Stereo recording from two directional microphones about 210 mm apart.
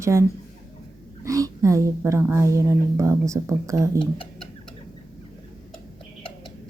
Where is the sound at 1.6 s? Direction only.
15° right (ahead or behind).